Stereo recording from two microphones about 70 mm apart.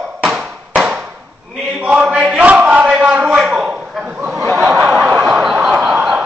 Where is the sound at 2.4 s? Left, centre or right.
Right.